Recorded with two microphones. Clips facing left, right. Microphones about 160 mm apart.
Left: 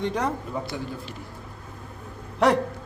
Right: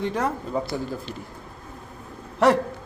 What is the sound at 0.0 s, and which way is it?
Speech, centre (ahead or behind).